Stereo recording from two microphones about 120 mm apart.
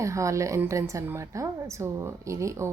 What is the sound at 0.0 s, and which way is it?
A woman's voice, 25° right (ahead or behind).